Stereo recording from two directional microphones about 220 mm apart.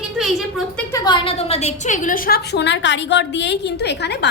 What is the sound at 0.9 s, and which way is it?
A woman's voice, 15° left (ahead or behind).